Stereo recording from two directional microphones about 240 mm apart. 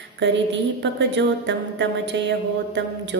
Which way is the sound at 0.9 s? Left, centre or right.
Right.